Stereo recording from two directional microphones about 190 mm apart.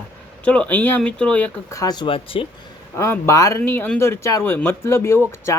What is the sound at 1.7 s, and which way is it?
Speech, 20° left (ahead or behind).